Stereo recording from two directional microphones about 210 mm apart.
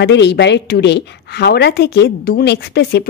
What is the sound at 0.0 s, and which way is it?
A woman's voice, 55° left (ahead or behind).